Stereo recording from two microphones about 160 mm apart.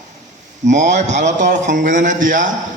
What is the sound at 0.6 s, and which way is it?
Speech, 50° right (ahead or behind).